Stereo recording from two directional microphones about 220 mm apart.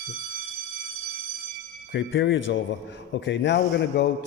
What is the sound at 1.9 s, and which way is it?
A man's voice, 55° left (ahead or behind).